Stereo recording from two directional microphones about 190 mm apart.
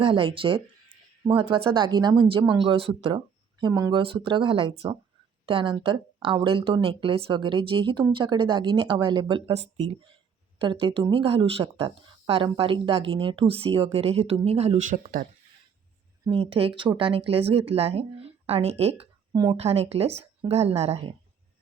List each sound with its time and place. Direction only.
0.0 s speech: 30° right (ahead or behind); by 15.3 s 45° right (ahead or behind)
16.2 s speech: 25° right (ahead or behind)
19.3 s speech: 20° right (ahead or behind)
19.5 s speech: 30° right (ahead or behind)